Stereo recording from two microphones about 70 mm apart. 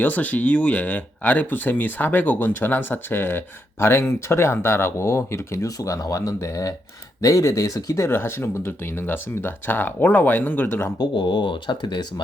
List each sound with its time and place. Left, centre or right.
0.0 s speech: left
5.6 s speech: left
8.1 s speech: left
10.9 s speech: left